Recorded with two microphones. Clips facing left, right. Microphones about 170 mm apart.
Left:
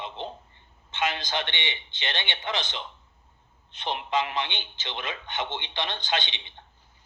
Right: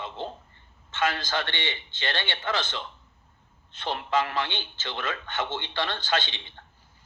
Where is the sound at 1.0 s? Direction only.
50° right (ahead or behind).